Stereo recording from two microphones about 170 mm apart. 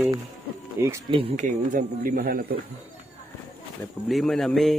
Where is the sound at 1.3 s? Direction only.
50° right (ahead or behind).